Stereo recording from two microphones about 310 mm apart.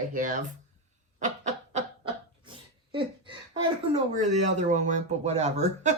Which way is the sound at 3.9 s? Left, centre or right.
Right.